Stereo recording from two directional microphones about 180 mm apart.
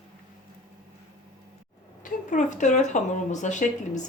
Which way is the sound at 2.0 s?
45° left (ahead or behind).